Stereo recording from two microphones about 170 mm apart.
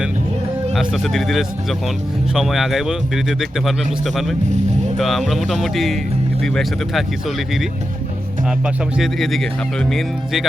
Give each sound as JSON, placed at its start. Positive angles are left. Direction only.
{"t": 0.7, "sound": "speech", "side_deg": 0}